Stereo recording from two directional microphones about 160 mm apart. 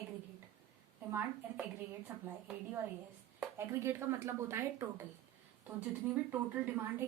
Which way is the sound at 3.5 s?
15° right (ahead or behind).